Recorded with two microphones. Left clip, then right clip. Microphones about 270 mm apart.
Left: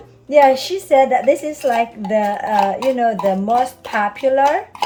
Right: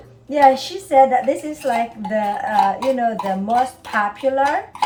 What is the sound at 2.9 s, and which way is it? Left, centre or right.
A woman's voice, left.